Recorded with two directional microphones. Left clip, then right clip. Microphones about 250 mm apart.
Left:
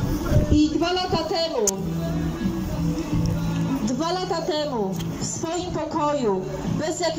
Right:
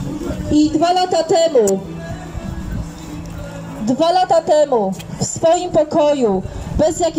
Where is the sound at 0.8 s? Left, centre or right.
Right.